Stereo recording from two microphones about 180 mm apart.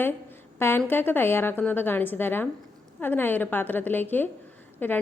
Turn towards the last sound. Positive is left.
turn(degrees=10)  # may be behind; listen again after turning